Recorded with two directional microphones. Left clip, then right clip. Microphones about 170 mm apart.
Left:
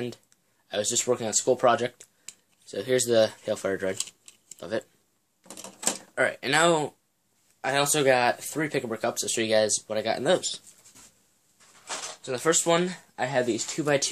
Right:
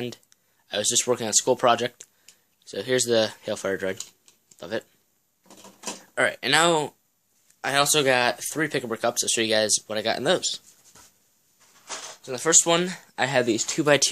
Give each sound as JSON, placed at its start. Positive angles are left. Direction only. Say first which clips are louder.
{"t": 0.0, "sound": "speech", "louder": "right 1 dB", "side_deg": -20}
{"t": 6.1, "sound": "speech", "louder": "right 3 dB", "side_deg": -25}
{"t": 12.2, "sound": "speech", "louder": "even", "side_deg": 0}
{"t": 12.4, "sound": "speech", "louder": "right 2 dB", "side_deg": -25}